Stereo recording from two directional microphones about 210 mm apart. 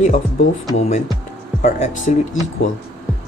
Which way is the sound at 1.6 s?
35° left (ahead or behind).